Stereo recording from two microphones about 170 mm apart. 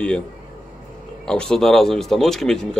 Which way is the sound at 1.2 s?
5° left (ahead or behind).